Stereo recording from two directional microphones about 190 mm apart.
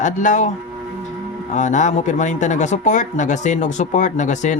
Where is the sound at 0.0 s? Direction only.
40° left (ahead or behind).